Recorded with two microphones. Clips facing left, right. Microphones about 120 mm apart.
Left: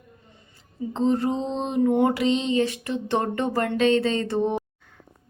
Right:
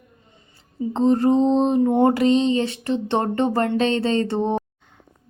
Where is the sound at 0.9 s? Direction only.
40° right (ahead or behind).